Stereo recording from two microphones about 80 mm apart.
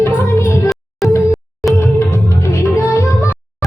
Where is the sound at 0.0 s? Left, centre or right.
Left.